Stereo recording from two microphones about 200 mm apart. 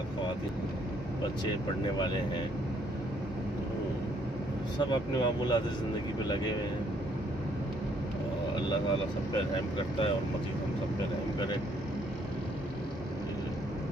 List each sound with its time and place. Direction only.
2.0 s speech: 20° left (ahead or behind)
4.7 s speech: 20° left (ahead or behind)